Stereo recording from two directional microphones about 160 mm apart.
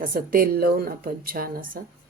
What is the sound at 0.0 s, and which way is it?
Speech, 65° right (ahead or behind).